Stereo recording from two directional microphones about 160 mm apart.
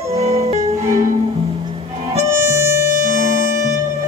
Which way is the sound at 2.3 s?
20° right (ahead or behind).